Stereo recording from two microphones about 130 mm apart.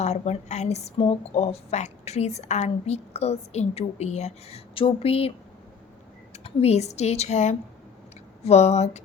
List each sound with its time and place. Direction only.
0.0 s a woman's voice: 60° left (ahead or behind)
6.3 s a woman's voice: 55° left (ahead or behind)